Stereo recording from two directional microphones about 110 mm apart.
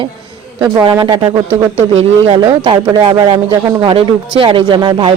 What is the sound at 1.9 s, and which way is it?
Speech, 60° right (ahead or behind).